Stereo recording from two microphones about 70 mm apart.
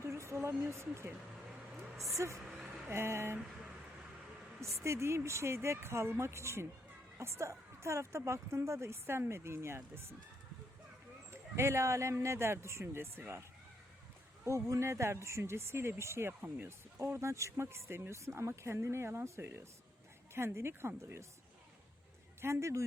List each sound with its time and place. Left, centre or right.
0.0 s a woman's voice: right
2.1 s a woman's voice: right
2.4 s a sound: centre
2.9 s speech: right
4.6 s speech: right
11.3 s speech: right
14.4 s speech: right
22.4 s a man's voice: right